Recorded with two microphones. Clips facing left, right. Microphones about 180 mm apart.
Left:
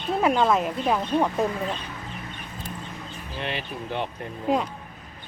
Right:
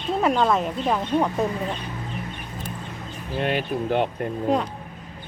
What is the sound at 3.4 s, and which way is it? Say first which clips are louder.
Speech: right 8 dB; 50° right (ahead or behind).